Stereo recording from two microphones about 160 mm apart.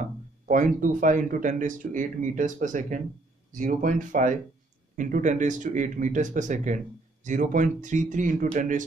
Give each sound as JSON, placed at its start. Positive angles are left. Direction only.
{"t": 0.5, "sound": "speech", "side_deg": -55}